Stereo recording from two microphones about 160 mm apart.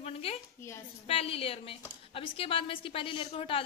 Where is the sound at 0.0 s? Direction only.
40° left (ahead or behind).